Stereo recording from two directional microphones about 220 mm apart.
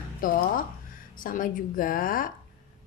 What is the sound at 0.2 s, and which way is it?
A woman's voice, 40° left (ahead or behind).